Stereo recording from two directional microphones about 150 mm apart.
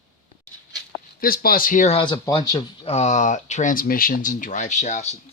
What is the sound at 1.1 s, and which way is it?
Speech, 75° left (ahead or behind).